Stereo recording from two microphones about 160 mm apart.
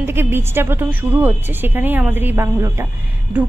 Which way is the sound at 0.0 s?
15° right (ahead or behind).